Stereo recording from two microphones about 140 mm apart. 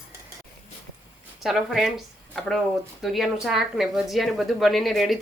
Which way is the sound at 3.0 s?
Centre (ahead or behind).